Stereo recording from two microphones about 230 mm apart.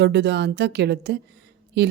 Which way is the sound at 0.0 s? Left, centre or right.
Right.